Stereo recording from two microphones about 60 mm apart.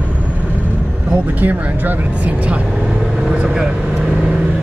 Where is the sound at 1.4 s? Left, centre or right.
Right.